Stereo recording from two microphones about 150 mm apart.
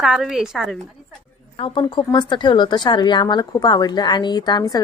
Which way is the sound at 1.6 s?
35° left (ahead or behind).